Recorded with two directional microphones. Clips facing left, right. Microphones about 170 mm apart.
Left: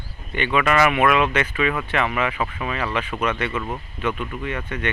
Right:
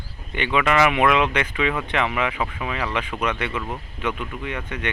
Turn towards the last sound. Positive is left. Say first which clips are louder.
# left 2 dB
turn(degrees=-10)  # may be behind; listen again after turning